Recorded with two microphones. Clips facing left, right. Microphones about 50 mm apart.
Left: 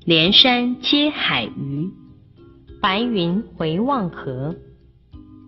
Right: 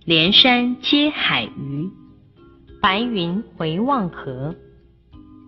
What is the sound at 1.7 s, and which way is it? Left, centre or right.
Speech, right.